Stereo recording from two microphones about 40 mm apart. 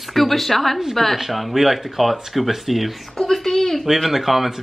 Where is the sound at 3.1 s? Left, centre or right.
Centre.